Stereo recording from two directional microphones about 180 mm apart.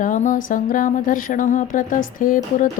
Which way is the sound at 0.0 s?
45° left (ahead or behind).